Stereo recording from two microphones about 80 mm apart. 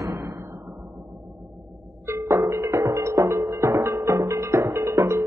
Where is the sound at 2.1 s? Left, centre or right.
Right.